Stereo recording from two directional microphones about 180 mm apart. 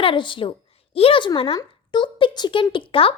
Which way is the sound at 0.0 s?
30° left (ahead or behind).